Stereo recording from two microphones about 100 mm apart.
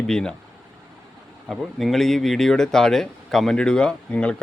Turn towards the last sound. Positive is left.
turn(degrees=10)  # may be behind; listen again after turning